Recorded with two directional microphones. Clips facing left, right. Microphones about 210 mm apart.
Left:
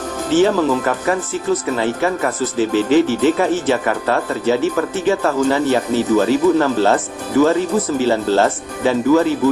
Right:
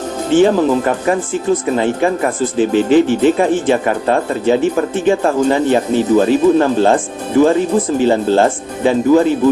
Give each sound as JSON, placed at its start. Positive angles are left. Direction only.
{"t": 0.4, "sound": "speech", "side_deg": -25}